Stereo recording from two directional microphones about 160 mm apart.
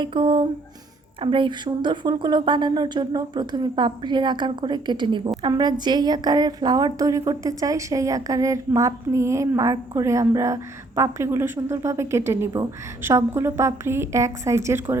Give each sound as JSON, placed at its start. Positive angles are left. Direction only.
{"t": 0.0, "sound": "a woman's voice", "side_deg": -35}